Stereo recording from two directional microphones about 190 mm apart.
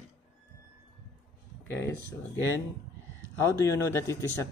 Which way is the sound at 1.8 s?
15° left (ahead or behind).